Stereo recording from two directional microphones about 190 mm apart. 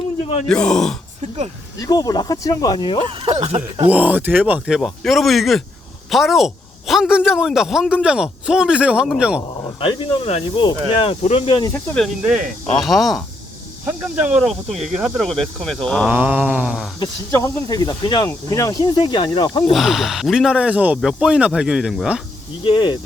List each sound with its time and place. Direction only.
0.4 s speech: 5° left (ahead or behind)
1.8 s speech: 20° left (ahead or behind)
3.1 s speech: 30° right (ahead or behind)
3.8 s speech: 10° right (ahead or behind)
9.8 s speech: 25° left (ahead or behind)
11.7 s speech: 5° left (ahead or behind)
17.0 s speech: 20° left (ahead or behind)
19.7 s speech: centre (ahead or behind)
22.6 s speech: 25° left (ahead or behind)